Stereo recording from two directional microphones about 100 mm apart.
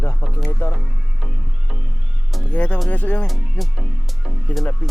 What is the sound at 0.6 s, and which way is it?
Speech, 30° left (ahead or behind).